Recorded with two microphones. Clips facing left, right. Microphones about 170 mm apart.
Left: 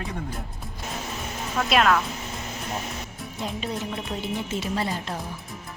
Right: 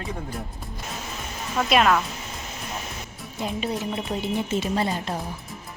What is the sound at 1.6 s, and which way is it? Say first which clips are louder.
Speech: right 1 dB; 5° right (ahead or behind).